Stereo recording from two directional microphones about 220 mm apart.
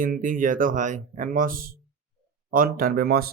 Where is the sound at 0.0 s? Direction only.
35° right (ahead or behind).